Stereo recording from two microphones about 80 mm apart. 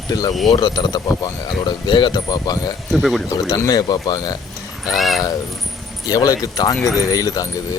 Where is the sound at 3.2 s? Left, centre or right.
Left.